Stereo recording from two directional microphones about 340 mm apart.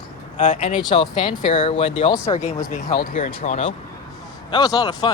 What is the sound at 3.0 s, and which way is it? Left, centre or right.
Speech, left.